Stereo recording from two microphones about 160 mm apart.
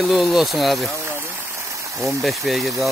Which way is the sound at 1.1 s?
15° right (ahead or behind).